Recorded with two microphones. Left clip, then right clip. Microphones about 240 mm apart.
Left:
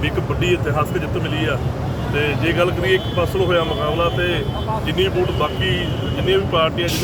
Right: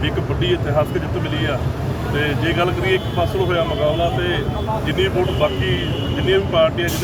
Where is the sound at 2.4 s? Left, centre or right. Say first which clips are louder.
Left 1 dB; centre.